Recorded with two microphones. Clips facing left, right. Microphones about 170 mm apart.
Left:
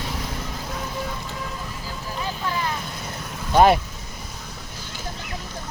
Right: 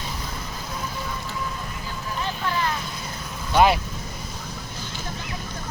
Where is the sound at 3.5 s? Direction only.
45° left (ahead or behind).